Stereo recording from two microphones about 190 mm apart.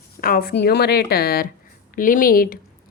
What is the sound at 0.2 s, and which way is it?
Speech, 50° left (ahead or behind).